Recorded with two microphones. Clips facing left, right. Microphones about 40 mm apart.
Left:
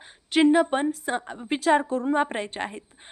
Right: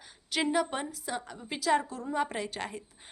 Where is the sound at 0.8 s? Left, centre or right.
Left.